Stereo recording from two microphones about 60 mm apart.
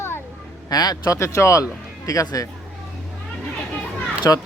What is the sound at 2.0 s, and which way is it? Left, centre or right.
Speech, left.